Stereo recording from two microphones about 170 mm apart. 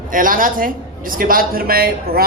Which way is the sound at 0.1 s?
55° right (ahead or behind).